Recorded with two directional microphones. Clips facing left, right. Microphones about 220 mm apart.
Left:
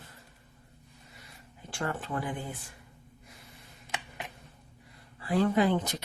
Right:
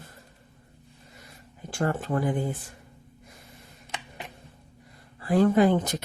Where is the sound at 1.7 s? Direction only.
45° right (ahead or behind).